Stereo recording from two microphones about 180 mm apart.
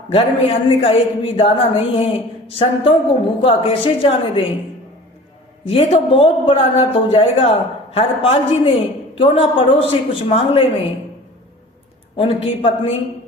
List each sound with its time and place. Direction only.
0.1 s speech: 30° left (ahead or behind)
5.6 s a woman's voice: 30° left (ahead or behind)
12.1 s speech: 30° left (ahead or behind)